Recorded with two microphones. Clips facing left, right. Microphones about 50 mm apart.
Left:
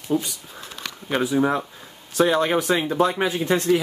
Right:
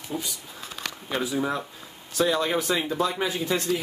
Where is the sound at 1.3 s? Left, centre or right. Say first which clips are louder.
Left 6 dB; left.